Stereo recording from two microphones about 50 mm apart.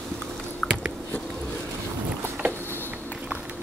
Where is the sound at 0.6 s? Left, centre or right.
Centre.